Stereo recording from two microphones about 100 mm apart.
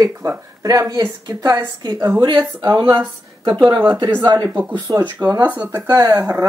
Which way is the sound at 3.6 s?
20° right (ahead or behind).